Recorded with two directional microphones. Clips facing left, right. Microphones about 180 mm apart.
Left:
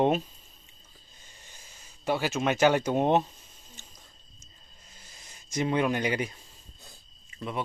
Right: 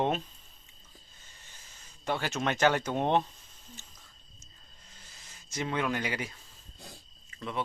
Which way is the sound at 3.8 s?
15° left (ahead or behind).